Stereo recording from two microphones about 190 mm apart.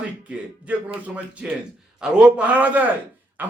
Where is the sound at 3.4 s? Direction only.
10° right (ahead or behind).